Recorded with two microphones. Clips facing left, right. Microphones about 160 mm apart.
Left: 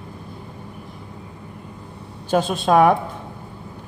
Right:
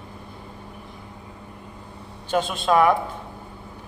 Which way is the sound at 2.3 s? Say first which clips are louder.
Left 3 dB; 45° left (ahead or behind).